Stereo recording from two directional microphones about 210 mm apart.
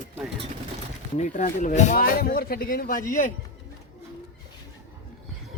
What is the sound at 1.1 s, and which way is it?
Speech, 35° left (ahead or behind).